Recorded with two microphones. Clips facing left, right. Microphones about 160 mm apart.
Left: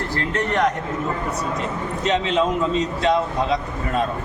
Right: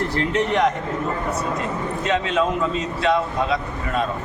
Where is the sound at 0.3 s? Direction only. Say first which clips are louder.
Right 1 dB; centre (ahead or behind).